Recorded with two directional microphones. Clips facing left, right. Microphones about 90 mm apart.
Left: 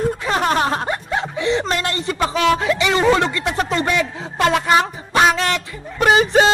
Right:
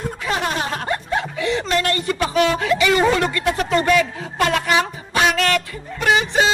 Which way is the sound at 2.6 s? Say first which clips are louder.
Right 1 dB; 25° left (ahead or behind).